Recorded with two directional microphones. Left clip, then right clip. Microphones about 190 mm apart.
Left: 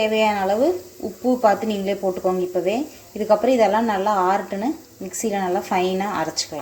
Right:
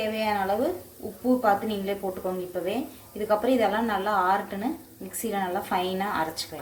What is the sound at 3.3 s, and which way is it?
Speech, 35° left (ahead or behind).